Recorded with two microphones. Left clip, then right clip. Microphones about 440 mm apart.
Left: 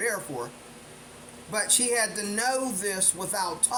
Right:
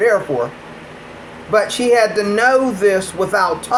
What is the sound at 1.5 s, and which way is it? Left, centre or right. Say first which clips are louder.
Speech: right 14 dB; left.